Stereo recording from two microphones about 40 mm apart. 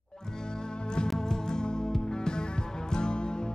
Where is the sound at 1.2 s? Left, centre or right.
Centre.